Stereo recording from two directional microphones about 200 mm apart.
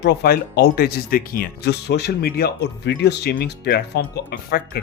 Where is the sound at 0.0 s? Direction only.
55° left (ahead or behind).